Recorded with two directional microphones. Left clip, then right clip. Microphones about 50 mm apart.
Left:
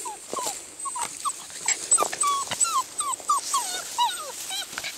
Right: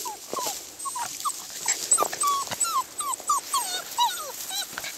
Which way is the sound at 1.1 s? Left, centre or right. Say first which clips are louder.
Even; right.